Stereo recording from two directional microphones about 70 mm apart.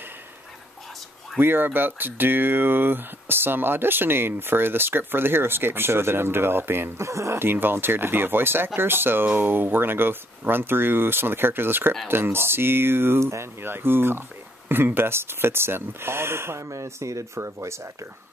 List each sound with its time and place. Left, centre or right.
1.4 s speech: right